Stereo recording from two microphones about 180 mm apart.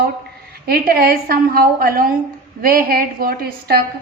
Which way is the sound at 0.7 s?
55° right (ahead or behind).